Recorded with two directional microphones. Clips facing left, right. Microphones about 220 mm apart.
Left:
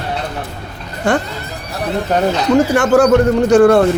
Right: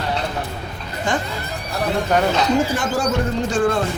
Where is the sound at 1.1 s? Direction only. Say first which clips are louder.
Left 7 dB; 65° left (ahead or behind).